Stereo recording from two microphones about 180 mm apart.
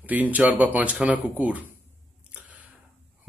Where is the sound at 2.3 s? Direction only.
10° right (ahead or behind).